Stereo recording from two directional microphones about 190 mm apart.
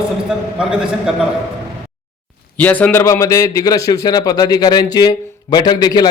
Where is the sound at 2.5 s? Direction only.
10° left (ahead or behind).